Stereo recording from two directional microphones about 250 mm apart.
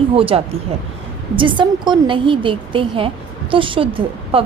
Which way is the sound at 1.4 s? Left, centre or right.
Centre.